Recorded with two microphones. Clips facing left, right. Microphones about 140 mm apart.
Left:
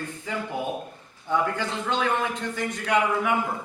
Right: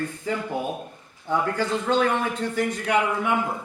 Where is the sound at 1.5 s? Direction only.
40° right (ahead or behind).